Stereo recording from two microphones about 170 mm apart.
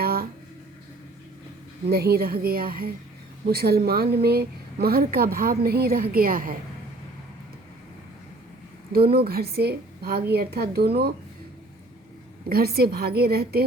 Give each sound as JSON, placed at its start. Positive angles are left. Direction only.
{"t": 0.0, "sound": "a sound", "side_deg": -60}
{"t": 1.9, "sound": "speech", "side_deg": -70}
{"t": 9.1, "sound": "a woman's voice", "side_deg": -65}
{"t": 12.5, "sound": "a woman's voice", "side_deg": -65}